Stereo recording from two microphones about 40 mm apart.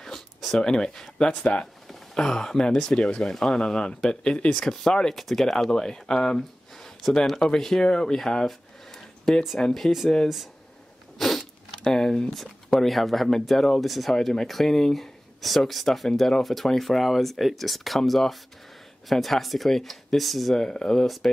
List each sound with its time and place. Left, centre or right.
0.5 s speech: centre
2.1 s speech: centre
5.1 s speech: centre
5.7 s speech: centre
8.2 s a sound: centre
9.6 s speech: centre
10.2 s speech: centre
11.1 s cat: centre
11.8 s speech: centre
12.8 s speech: centre
20.5 s speech: centre